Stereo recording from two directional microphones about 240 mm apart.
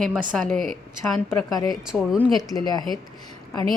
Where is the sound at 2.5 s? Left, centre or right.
Centre.